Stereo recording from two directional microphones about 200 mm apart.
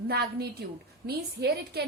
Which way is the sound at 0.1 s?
55° right (ahead or behind).